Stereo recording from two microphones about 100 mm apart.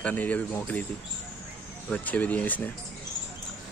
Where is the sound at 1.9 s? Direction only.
15° left (ahead or behind).